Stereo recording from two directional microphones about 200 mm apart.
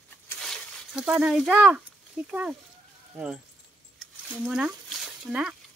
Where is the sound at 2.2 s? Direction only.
5° right (ahead or behind).